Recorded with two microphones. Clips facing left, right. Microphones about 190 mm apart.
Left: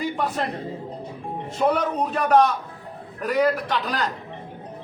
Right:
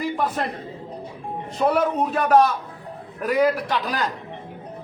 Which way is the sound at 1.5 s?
5° right (ahead or behind).